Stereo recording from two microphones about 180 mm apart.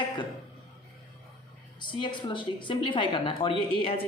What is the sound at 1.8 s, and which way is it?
A woman's voice, 25° left (ahead or behind).